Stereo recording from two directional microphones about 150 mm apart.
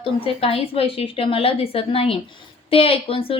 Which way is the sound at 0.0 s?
40° left (ahead or behind).